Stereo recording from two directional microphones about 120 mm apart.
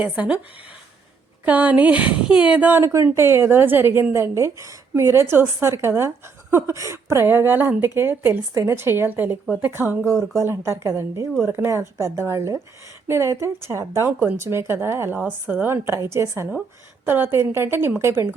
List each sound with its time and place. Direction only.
0.0 s a woman's voice: 10° right (ahead or behind)
1.5 s a woman's voice: 15° right (ahead or behind)